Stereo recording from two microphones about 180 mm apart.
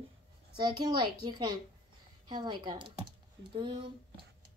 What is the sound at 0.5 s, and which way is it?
A child's voice, 25° right (ahead or behind).